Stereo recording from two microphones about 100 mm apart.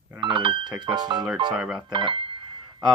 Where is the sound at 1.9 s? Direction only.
55° right (ahead or behind).